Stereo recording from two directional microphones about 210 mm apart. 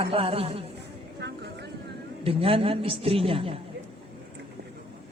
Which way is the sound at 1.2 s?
55° right (ahead or behind).